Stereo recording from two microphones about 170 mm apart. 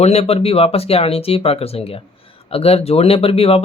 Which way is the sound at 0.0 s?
35° left (ahead or behind).